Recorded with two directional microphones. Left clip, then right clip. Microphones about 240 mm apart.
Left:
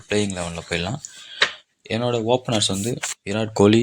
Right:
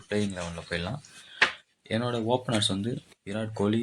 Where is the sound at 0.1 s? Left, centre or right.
Left.